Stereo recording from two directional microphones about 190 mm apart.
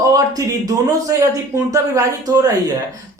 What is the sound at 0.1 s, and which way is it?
Speech, 20° right (ahead or behind).